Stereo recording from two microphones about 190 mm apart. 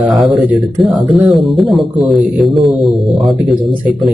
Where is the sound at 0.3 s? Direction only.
Centre (ahead or behind).